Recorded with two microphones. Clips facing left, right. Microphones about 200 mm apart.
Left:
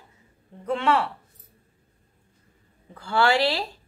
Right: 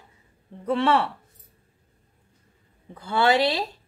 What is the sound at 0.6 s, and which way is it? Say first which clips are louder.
Speech: right 2 dB; 30° right (ahead or behind).